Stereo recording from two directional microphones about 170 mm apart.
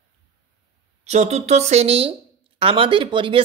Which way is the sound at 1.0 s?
40° right (ahead or behind).